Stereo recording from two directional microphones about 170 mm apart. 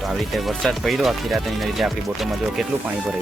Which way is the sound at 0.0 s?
Centre (ahead or behind).